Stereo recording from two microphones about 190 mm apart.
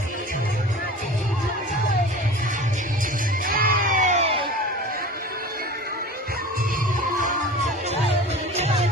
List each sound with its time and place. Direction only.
3.4 s music: 50° right (ahead or behind); by 4.4 s 30° right (ahead or behind)
7.2 s music: 40° right (ahead or behind)